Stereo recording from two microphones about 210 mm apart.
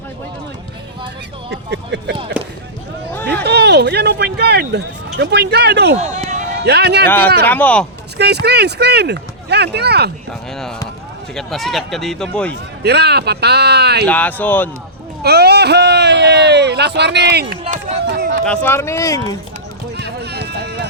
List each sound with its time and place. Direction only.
1.5 s speech: 55° right (ahead or behind)
2.4 s basketball bounce: 5° right (ahead or behind)
3.4 s a sound: 50° right (ahead or behind)
6.0 s speech: 35° right (ahead or behind)
6.7 s speech: 50° right (ahead or behind)
7.4 s speech: 10° left (ahead or behind)
8.2 s speech: 50° right (ahead or behind)
11.3 s speech: centre (ahead or behind)
12.8 s speech: 50° right (ahead or behind)
14.1 s speech: 10° left (ahead or behind)
15.2 s speech: 50° right (ahead or behind)
18.0 s a sound: 50° right (ahead or behind)
18.4 s speech: 5° left (ahead or behind)
20.0 s clip-clop: 50° right (ahead or behind)